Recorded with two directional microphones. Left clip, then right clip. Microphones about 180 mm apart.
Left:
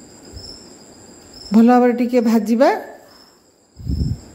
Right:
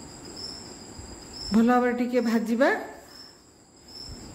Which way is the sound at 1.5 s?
35° left (ahead or behind).